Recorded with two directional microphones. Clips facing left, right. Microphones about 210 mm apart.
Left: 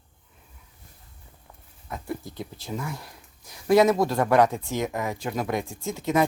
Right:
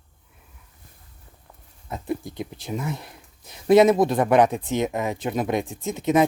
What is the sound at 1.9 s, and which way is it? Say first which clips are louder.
Speech: right 4 dB; 20° right (ahead or behind).